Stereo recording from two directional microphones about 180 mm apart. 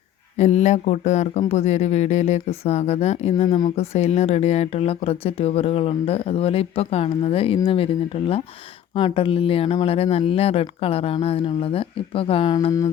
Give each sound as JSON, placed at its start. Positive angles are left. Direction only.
{"t": 0.3, "sound": "speech", "side_deg": 40}
{"t": 12.5, "sound": "mantra", "side_deg": 20}